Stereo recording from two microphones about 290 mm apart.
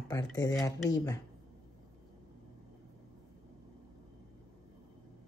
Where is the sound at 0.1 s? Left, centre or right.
Centre.